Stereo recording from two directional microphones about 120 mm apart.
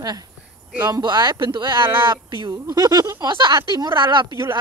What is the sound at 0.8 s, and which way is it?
Speech, 35° right (ahead or behind).